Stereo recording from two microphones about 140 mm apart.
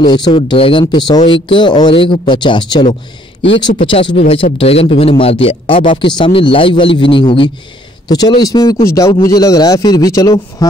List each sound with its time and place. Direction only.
0.0 s a man's voice: 35° left (ahead or behind)